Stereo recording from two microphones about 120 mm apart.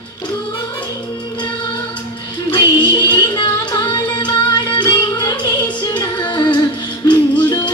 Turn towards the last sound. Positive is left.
turn(degrees=40)  # may be behind; listen again after turning